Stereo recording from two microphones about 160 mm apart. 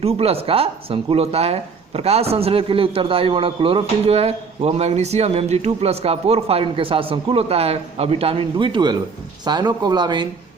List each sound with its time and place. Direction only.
0.0 s speech: 40° right (ahead or behind)